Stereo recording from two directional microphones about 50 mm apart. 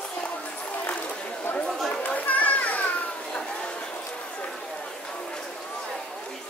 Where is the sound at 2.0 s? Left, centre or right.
Left.